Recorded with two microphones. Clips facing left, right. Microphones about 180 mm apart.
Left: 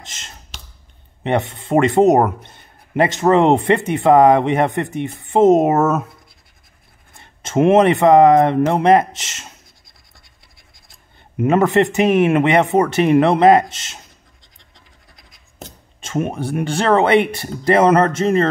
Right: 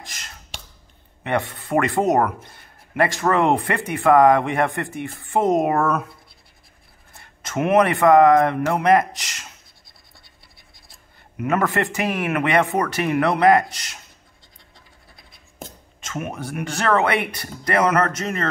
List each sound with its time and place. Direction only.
0.0 s a sound: 25° left (ahead or behind)
1.2 s a man's voice: 25° left (ahead or behind)
7.2 s speech: 25° left (ahead or behind)
11.3 s a man's voice: 25° left (ahead or behind)
16.0 s a man's voice: 30° left (ahead or behind)